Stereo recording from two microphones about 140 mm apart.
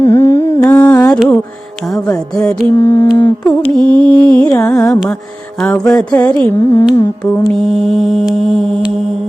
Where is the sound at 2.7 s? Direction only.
20° left (ahead or behind).